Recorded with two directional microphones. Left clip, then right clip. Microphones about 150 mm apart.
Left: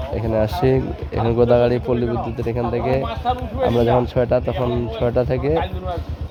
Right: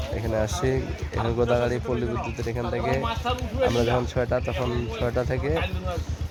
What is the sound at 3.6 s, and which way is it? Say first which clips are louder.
Speech: left 6 dB; 35° left (ahead or behind).